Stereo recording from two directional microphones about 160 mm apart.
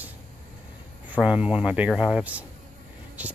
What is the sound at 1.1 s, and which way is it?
Speech, 10° right (ahead or behind).